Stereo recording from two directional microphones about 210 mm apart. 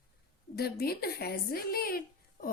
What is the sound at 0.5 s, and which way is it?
A woman's voice, 50° left (ahead or behind).